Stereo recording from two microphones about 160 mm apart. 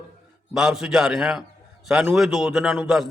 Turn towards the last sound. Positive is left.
turn(degrees=-5)  # may be behind; listen again after turning